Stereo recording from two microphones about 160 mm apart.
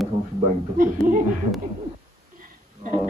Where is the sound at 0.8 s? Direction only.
60° right (ahead or behind).